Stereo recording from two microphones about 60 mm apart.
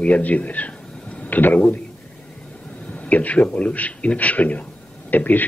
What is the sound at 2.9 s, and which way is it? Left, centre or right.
Speech, left.